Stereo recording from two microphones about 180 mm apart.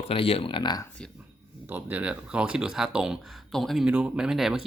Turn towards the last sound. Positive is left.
turn(degrees=0)  # may be behind; listen again after turning